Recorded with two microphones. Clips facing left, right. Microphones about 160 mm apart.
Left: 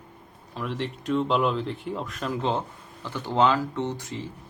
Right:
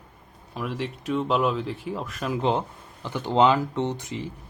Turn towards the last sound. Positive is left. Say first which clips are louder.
# right 2 dB
turn(degrees=-15)  # may be behind; listen again after turning